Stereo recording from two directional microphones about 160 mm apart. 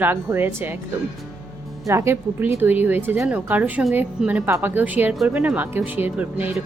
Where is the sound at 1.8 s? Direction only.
15° right (ahead or behind).